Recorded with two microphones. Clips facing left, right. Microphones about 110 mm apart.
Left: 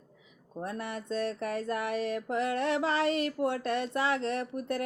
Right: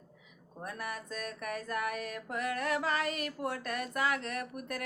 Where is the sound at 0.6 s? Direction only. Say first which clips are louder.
Left 4 dB; 25° left (ahead or behind).